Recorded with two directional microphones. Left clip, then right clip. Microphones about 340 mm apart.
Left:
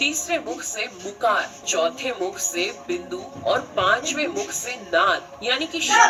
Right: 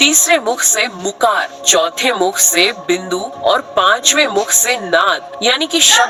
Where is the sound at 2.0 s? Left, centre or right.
Right.